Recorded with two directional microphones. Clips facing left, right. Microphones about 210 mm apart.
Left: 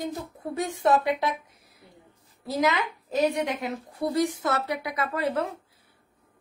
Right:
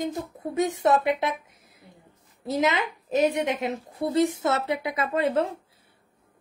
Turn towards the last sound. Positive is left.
turn(degrees=-25)  # may be behind; listen again after turning